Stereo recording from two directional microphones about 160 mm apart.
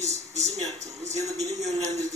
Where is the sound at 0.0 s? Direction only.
45° right (ahead or behind).